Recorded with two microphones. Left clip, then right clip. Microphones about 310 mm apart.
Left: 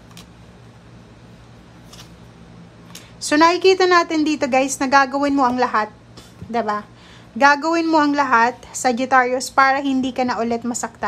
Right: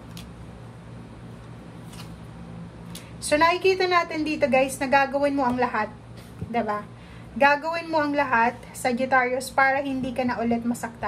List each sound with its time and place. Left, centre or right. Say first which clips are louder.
3.3 s a woman's voice: left 6 dB; centre